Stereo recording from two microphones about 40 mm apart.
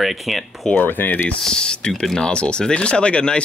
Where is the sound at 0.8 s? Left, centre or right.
Left.